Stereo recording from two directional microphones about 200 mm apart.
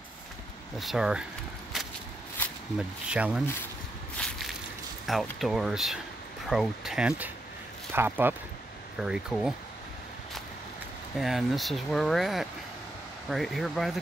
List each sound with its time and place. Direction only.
0.7 s speech: centre (ahead or behind)
3.1 s speech: 5° right (ahead or behind)
4.2 s a sound: centre (ahead or behind)
5.0 s speech: centre (ahead or behind)
11.1 s speech: centre (ahead or behind)